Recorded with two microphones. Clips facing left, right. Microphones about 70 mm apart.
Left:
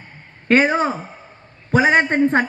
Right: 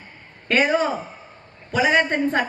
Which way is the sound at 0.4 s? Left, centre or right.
Left.